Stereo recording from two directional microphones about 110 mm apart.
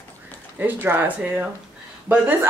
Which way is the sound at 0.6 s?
15° right (ahead or behind).